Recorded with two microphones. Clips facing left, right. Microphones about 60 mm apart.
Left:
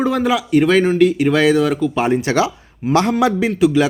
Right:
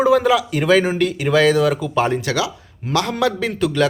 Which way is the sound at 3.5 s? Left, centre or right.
Centre.